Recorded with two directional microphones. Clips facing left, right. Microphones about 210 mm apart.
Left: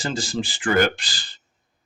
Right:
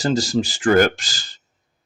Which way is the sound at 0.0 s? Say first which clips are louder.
Right 7 dB; 40° right (ahead or behind).